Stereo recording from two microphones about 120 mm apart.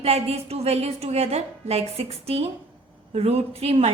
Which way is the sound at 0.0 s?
60° right (ahead or behind).